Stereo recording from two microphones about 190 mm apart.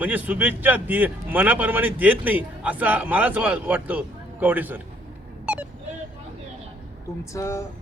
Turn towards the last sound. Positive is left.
turn(degrees=15)  # may be behind; listen again after turning